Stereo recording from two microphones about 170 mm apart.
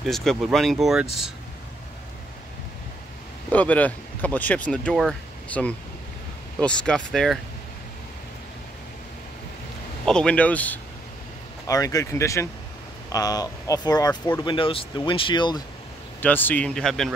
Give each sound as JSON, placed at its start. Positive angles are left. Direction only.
{"t": 0.0, "sound": "speech", "side_deg": 0}
{"t": 3.5, "sound": "speech", "side_deg": 10}
{"t": 10.0, "sound": "speech", "side_deg": 5}
{"t": 11.6, "sound": "speech", "side_deg": 20}
{"t": 16.2, "sound": "speech", "side_deg": 10}